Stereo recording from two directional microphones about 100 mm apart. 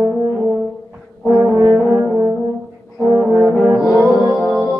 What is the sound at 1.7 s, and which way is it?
Brass instrument, 5° right (ahead or behind).